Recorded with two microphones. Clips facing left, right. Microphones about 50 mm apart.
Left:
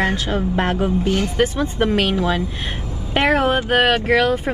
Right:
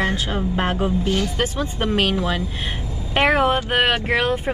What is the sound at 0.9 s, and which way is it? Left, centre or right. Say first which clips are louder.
Speech: left 3 dB; left.